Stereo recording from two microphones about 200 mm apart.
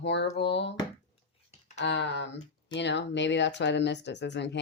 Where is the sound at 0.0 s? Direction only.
60° left (ahead or behind).